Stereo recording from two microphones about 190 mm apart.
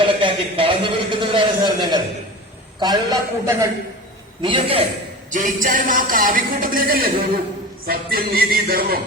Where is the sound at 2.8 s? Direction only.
20° right (ahead or behind).